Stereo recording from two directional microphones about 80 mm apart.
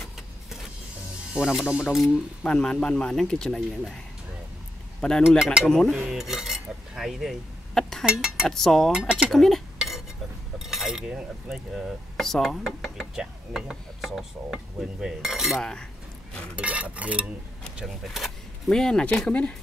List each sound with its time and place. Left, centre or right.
0.0 s vehicle: centre
1.3 s speech: centre
2.4 s speech: centre
5.0 s speech: centre
5.4 s dishes: centre
5.7 s speech: centre
6.0 s cutlery: centre
8.0 s speech: centre
8.5 s speech: centre
9.8 s dishes: centre
10.6 s cutlery: centre
12.2 s speech: centre
16.5 s dishes: centre
17.7 s speech: centre